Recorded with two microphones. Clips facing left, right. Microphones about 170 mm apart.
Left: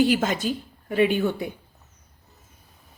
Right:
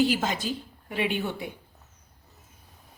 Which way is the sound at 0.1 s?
55° left (ahead or behind).